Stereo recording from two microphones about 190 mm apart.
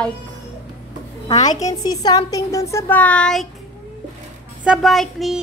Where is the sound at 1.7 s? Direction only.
20° left (ahead or behind); by 3.4 s 5° left (ahead or behind).